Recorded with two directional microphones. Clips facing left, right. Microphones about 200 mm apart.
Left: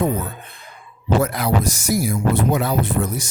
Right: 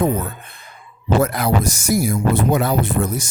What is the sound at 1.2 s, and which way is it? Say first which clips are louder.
Speech: right 2 dB; 50° right (ahead or behind).